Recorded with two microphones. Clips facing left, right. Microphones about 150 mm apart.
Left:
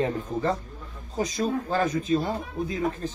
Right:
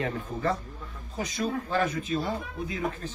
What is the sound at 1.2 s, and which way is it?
Speech, 40° left (ahead or behind).